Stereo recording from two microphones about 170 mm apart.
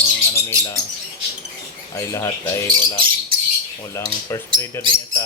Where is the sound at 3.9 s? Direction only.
15° left (ahead or behind).